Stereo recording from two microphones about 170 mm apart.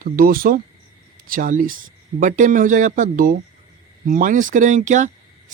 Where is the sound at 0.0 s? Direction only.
60° right (ahead or behind).